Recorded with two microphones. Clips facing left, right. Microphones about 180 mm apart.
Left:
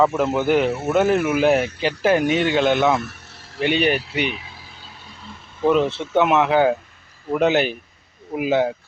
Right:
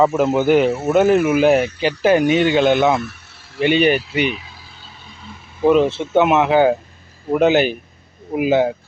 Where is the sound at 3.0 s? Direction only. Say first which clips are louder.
Right 3 dB; 45° left (ahead or behind).